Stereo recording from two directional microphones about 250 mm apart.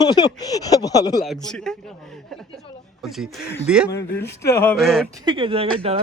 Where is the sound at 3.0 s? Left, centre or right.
Centre.